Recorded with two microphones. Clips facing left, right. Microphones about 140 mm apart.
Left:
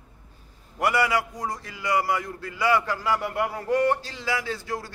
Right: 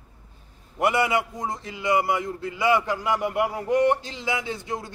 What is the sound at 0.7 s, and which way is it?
A man's voice, 20° right (ahead or behind).